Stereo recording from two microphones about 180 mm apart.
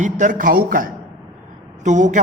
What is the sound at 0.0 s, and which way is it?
Speech, 45° right (ahead or behind).